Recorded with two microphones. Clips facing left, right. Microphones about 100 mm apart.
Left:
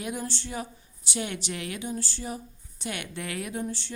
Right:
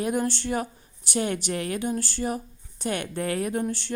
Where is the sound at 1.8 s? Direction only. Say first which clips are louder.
Right 6 dB; 60° right (ahead or behind).